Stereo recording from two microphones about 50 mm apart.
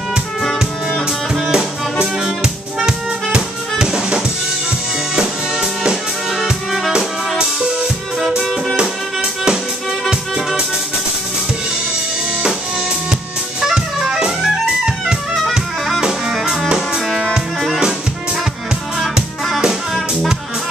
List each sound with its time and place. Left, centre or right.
1.3 s music: centre
6.9 s music: centre
13.6 s music: centre
15.4 s music: centre
18.9 s music: centre